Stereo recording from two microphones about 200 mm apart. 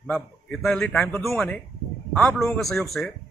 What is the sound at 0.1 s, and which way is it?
A man's voice, 5° left (ahead or behind).